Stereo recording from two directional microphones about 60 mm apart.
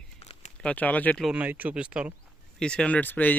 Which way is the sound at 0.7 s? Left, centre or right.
Left.